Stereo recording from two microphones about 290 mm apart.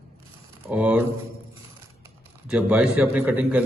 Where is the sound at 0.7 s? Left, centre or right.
Centre.